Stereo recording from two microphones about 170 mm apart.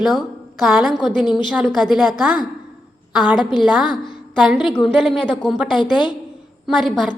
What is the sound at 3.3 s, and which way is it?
A woman's voice, 5° right (ahead or behind).